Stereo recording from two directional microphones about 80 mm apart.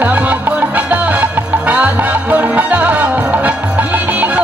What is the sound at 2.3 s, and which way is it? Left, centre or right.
Music, right.